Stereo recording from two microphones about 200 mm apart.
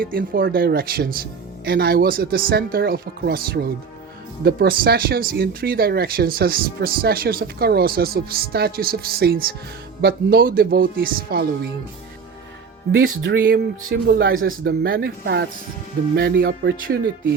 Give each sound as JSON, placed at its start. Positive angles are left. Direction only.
{"t": 0.0, "sound": "speech", "side_deg": -45}
{"t": 13.0, "sound": "speech", "side_deg": -90}
{"t": 13.4, "sound": "speech", "side_deg": -50}